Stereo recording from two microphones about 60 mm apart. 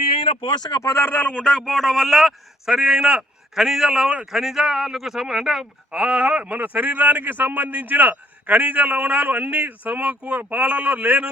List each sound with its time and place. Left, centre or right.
0.9 s a man's voice: left; by 11.3 s right